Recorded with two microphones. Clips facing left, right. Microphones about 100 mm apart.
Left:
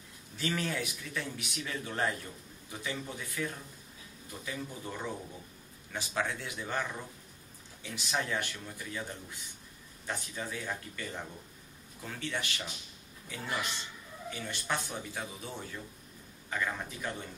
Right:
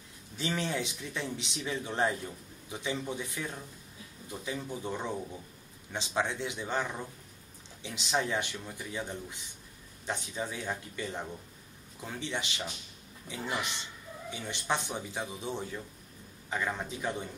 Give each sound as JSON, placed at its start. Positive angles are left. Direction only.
{"t": 0.4, "sound": "a man's voice", "side_deg": -20}